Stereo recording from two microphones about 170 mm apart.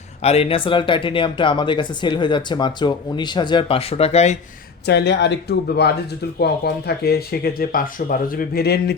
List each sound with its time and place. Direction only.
0.2 s speech: 35° left (ahead or behind)
4.9 s speech: 90° left; by 9.0 s 70° left (ahead or behind)